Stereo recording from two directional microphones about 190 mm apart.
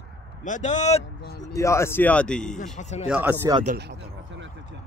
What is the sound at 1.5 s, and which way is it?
Speech, 15° left (ahead or behind).